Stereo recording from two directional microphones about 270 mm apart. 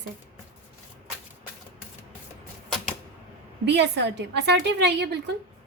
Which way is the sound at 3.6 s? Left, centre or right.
Right.